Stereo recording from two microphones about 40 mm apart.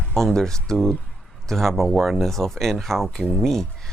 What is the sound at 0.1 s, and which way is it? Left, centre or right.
Speech, centre.